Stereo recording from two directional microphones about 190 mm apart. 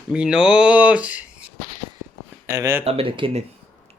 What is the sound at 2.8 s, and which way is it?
Speech, 30° right (ahead or behind).